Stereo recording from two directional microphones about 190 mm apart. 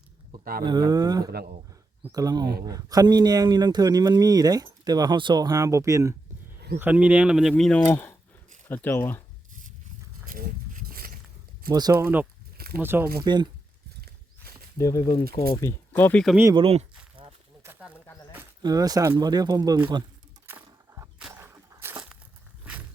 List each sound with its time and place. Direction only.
0.6 s speech: 25° right (ahead or behind)
1.3 s speech: 55° right (ahead or behind)
2.0 s speech: 20° right (ahead or behind); by 9.2 s 10° left (ahead or behind)
10.2 s a sound: 50° right (ahead or behind)
11.7 s speech: 20° right (ahead or behind)
13.2 s speech: 25° right (ahead or behind)
14.0 s horse: 55° right (ahead or behind)
14.8 s speech: 15° left (ahead or behind)
16.3 s speech: 10° right (ahead or behind)
16.6 s speech: 30° right (ahead or behind)
17.6 s snake: 10° right (ahead or behind)
17.9 s a sound: 15° left (ahead or behind)
18.3 s speech: 20° right (ahead or behind)
20.5 s a sound: 10° right (ahead or behind)